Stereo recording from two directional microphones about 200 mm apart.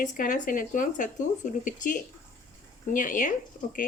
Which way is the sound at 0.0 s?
40° left (ahead or behind).